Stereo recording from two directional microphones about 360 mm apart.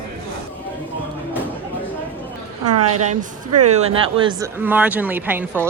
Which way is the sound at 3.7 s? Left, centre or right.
Centre.